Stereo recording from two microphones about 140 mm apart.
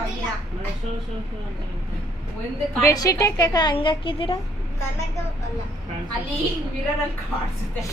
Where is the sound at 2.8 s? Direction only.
25° left (ahead or behind).